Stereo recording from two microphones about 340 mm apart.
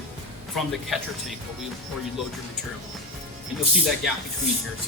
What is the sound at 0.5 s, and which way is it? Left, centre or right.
Speech, centre.